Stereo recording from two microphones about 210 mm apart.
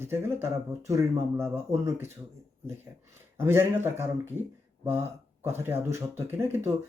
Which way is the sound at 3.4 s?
10° right (ahead or behind).